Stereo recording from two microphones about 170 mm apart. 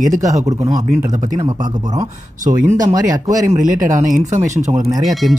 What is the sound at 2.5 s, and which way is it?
Speech, 20° right (ahead or behind).